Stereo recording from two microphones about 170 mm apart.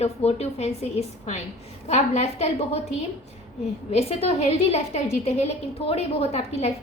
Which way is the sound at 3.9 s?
35° left (ahead or behind).